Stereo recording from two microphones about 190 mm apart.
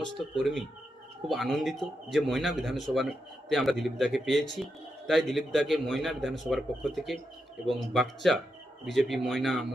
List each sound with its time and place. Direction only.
0.3 s a man's voice: centre (ahead or behind)